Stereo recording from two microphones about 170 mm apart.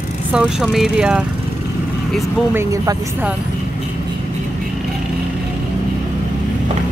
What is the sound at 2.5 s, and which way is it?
Speech, 20° right (ahead or behind).